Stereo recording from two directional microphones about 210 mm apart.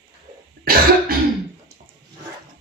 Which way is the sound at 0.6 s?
45° right (ahead or behind).